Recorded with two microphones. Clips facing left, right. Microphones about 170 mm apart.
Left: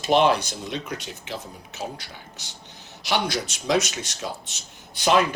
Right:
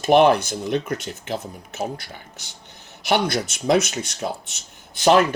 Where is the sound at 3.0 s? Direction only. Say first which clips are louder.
Right 4 dB; 55° right (ahead or behind).